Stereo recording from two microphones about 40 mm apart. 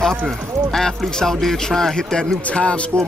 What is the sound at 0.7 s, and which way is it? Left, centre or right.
A man's voice, centre.